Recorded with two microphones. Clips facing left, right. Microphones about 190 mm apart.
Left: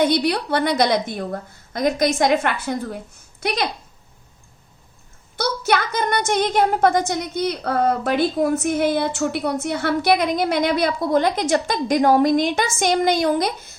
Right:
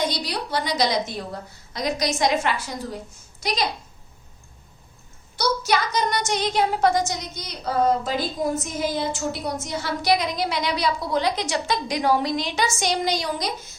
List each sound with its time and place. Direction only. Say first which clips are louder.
0.0 s a woman's voice: left 8 dB; 60° left (ahead or behind)
5.4 s a woman's voice: left 2 dB; 55° left (ahead or behind)